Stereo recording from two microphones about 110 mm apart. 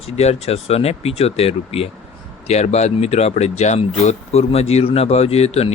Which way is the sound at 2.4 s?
80° left.